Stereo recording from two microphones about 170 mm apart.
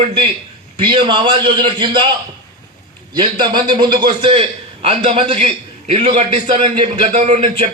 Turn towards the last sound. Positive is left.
turn(degrees=-40)  # may be behind; listen again after turning